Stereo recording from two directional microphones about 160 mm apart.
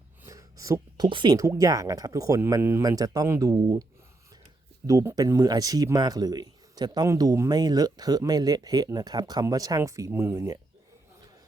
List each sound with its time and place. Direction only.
0.3 s speech: 20° right (ahead or behind)
4.9 s speech: 20° right (ahead or behind)